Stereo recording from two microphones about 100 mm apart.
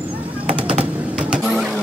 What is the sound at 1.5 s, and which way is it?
Vehicle, centre (ahead or behind).